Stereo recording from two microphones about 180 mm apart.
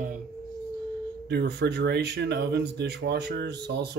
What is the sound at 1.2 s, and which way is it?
Speech, 65° right (ahead or behind).